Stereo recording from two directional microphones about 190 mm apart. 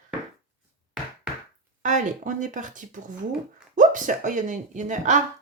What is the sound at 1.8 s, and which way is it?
Speech, 40° right (ahead or behind).